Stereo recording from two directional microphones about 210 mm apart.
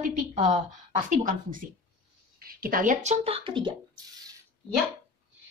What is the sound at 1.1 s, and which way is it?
A woman's voice, 40° right (ahead or behind).